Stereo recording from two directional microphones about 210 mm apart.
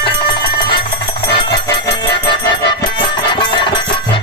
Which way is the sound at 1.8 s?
20° left (ahead or behind).